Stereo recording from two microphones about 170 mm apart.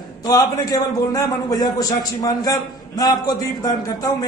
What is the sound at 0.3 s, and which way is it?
A man's voice, 20° left (ahead or behind).